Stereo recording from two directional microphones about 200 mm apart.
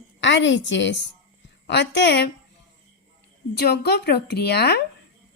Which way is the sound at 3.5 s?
55° left (ahead or behind).